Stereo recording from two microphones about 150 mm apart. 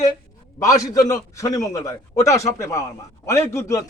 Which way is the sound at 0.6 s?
20° left (ahead or behind).